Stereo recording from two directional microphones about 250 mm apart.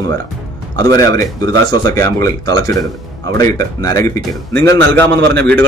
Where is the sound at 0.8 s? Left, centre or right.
Centre.